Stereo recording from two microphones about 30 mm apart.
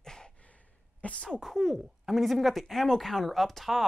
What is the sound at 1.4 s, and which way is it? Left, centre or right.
Speech, centre.